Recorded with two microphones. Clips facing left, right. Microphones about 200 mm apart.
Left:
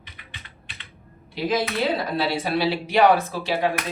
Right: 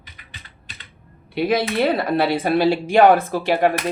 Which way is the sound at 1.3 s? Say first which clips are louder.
Right 5 dB; 60° right (ahead or behind).